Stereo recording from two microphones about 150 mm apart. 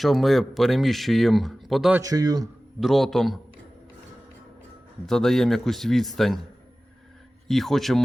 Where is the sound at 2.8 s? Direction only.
Centre (ahead or behind).